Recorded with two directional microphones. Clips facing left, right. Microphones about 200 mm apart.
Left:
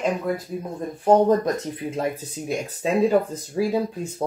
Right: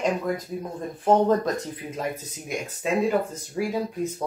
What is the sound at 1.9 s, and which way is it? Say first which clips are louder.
Speech: left 4 dB; 30° left (ahead or behind).